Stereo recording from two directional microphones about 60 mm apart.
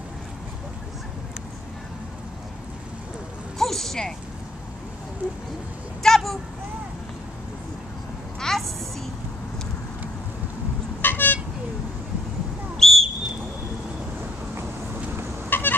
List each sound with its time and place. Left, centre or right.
3.5 s a sound: centre
6.0 s vehicle: centre
8.4 s a sound: centre
11.0 s vehicle: left
12.7 s whistle: centre
15.5 s fowl: left